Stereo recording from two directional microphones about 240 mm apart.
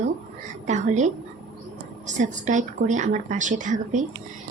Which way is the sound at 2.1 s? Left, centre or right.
Right.